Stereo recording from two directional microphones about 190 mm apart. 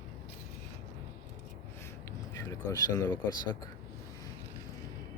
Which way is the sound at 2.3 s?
15° left (ahead or behind).